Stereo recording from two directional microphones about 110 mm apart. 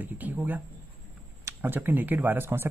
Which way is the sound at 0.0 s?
15° right (ahead or behind).